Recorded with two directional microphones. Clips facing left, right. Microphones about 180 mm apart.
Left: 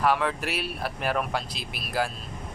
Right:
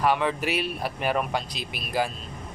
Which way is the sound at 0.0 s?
Centre (ahead or behind).